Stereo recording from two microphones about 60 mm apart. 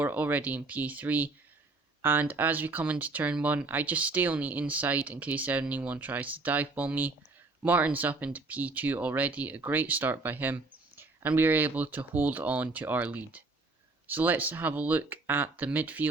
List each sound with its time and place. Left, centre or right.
0.0 s speech: right